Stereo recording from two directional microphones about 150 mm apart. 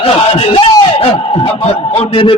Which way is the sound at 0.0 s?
40° left (ahead or behind).